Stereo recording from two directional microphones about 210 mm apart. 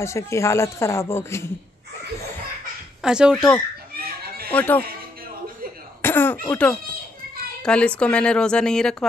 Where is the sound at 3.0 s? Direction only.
5° right (ahead or behind).